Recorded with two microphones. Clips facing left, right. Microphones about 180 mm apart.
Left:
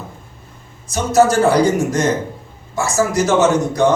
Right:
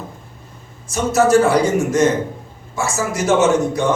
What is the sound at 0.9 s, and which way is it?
A man's voice, 40° left (ahead or behind).